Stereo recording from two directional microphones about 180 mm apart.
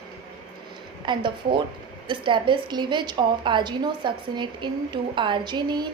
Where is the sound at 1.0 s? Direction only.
25° right (ahead or behind).